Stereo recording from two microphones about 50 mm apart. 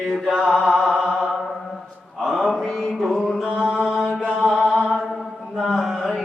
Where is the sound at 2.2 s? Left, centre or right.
Centre.